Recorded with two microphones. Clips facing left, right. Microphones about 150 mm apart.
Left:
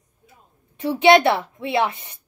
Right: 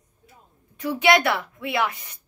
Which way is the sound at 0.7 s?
25° left (ahead or behind).